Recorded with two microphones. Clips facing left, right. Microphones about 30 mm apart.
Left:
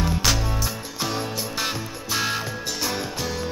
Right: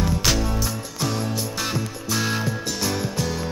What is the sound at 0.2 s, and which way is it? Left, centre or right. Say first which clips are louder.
Music: right 1 dB; centre.